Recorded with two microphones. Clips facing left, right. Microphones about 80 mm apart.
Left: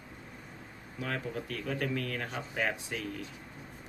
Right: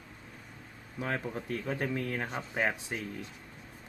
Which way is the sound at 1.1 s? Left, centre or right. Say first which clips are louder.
Right 1 dB; right.